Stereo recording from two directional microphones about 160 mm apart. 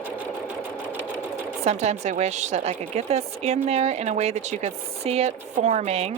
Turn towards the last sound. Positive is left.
turn(degrees=-40)  # may be behind; listen again after turning